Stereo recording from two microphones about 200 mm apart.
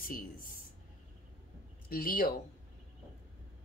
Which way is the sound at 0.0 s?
45° left (ahead or behind).